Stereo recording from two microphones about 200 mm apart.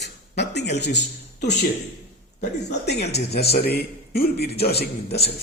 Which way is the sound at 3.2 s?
55° left (ahead or behind).